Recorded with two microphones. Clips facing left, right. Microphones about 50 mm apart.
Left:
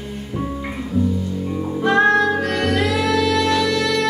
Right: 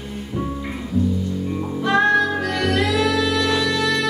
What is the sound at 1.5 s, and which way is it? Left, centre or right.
Music, centre.